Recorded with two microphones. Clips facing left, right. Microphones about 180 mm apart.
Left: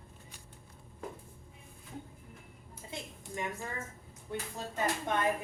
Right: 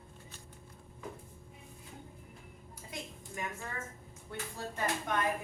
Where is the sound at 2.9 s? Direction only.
25° left (ahead or behind).